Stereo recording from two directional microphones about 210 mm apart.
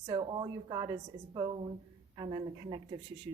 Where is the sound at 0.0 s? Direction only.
20° right (ahead or behind).